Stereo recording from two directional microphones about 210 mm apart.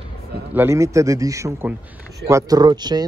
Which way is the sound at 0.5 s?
10° right (ahead or behind).